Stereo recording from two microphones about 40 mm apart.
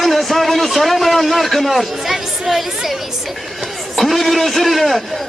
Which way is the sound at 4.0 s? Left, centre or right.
Centre.